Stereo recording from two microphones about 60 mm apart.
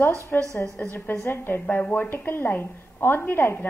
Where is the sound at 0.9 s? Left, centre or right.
Left.